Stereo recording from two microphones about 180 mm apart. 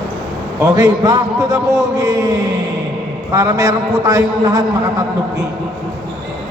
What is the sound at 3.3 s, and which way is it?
A man's voice, 20° right (ahead or behind).